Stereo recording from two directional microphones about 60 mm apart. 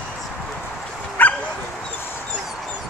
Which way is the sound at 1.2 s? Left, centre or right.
Left.